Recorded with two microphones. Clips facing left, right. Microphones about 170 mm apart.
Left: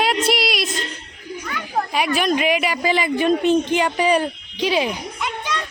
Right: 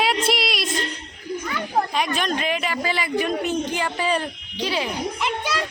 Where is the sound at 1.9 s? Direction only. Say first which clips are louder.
Left 4 dB; 10° left (ahead or behind).